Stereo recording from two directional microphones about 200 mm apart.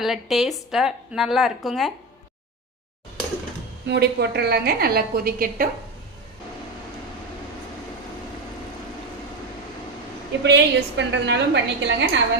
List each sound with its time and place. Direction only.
0.0 s a woman's voice: centre (ahead or behind)
3.8 s a woman's voice: 55° right (ahead or behind)
10.4 s a woman's voice: 60° right (ahead or behind)